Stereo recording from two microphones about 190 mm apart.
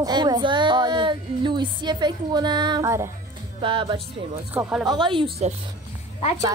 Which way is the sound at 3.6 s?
25° right (ahead or behind).